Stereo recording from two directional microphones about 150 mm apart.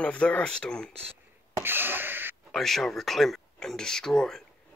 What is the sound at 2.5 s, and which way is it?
Speech, centre (ahead or behind).